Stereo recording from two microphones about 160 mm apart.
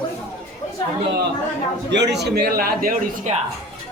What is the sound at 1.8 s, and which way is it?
A man's voice, 90° right.